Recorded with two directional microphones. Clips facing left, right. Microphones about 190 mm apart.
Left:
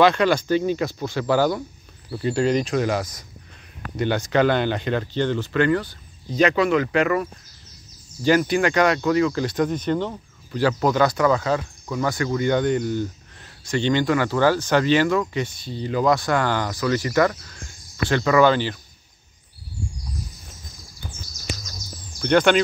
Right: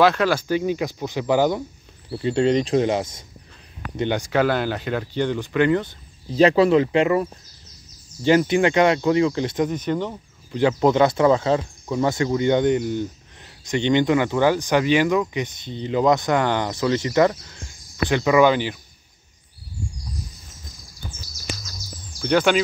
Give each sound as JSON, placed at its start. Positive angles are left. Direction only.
{"t": 0.0, "sound": "speech", "side_deg": -5}
{"t": 10.8, "sound": "speech", "side_deg": -25}
{"t": 22.2, "sound": "speech", "side_deg": -5}